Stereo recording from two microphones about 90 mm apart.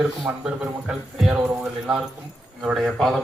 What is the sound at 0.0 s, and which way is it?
Speech, 10° right (ahead or behind).